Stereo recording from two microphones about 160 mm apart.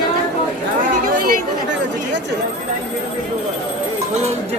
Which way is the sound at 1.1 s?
60° right (ahead or behind).